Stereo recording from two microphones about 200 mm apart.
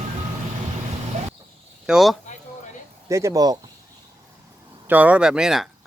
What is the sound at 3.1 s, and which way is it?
Speech, 15° right (ahead or behind).